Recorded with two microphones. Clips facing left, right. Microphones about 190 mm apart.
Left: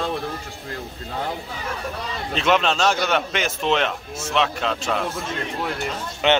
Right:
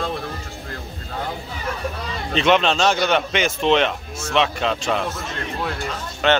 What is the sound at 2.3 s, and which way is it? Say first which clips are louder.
A man's voice: right 3 dB; 5° left (ahead or behind).